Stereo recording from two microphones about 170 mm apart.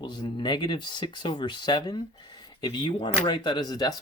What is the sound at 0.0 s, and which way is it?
Speech, 25° left (ahead or behind).